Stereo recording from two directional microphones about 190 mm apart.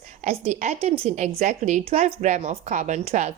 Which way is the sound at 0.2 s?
35° right (ahead or behind).